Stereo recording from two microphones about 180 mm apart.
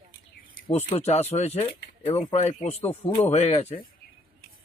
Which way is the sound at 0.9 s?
35° left (ahead or behind).